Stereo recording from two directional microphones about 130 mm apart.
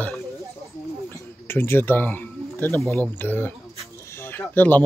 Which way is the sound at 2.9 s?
15° left (ahead or behind).